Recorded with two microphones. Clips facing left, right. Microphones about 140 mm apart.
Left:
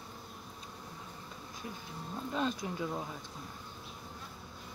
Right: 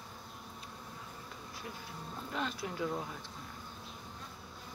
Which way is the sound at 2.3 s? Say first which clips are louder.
Left 4 dB; 20° left (ahead or behind).